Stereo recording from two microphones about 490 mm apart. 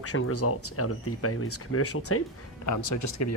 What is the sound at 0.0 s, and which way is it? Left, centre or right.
Speech, left.